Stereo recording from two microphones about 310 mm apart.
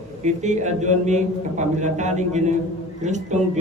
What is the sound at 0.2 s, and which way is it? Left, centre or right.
A man's voice, right.